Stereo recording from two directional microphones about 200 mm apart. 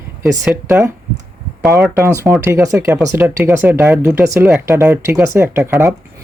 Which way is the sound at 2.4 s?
15° right (ahead or behind).